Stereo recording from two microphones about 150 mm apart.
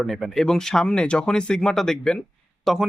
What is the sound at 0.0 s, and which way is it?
Speech, centre (ahead or behind).